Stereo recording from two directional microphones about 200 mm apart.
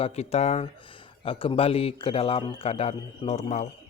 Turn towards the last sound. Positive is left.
turn(degrees=30)  # may be behind; listen again after turning